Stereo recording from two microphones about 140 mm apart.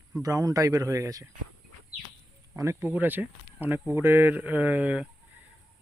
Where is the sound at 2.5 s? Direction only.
20° right (ahead or behind).